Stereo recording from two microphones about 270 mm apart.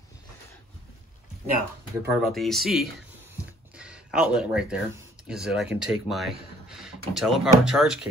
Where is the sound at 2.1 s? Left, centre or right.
Centre.